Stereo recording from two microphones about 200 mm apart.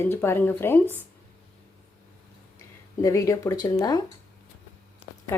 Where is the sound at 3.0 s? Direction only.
15° left (ahead or behind).